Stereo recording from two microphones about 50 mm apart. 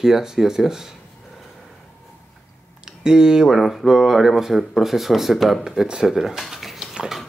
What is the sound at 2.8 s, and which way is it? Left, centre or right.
Speech, centre.